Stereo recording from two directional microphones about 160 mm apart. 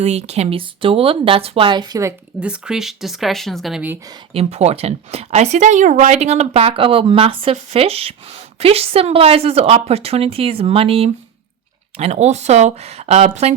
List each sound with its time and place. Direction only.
0.0 s speech: 45° right (ahead or behind); by 2.1 s 20° right (ahead or behind)
2.4 s speech: 5° right (ahead or behind)
4.4 s speech: 40° right (ahead or behind)